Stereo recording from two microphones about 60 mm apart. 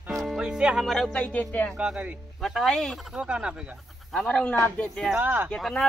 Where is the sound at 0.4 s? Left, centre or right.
Centre.